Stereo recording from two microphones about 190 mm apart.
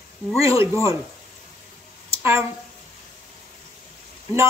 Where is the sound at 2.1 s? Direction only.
15° right (ahead or behind).